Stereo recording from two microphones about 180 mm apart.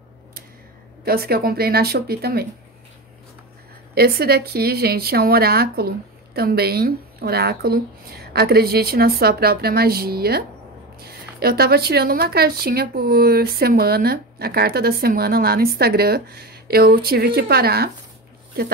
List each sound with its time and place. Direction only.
1.0 s speech: 55° right (ahead or behind)
3.9 s speech: 60° right (ahead or behind)